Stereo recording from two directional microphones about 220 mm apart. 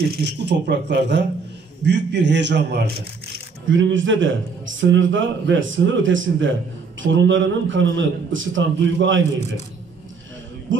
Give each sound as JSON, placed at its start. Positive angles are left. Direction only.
{"t": 0.0, "sound": "a man's voice", "side_deg": -50}
{"t": 10.7, "sound": "a man's voice", "side_deg": -60}